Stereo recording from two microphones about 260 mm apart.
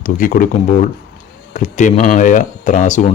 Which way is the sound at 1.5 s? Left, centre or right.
Left.